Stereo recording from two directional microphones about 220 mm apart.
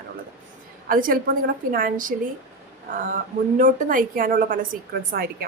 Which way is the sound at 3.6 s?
35° right (ahead or behind).